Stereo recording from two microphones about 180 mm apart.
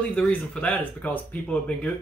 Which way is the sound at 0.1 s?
5° left (ahead or behind).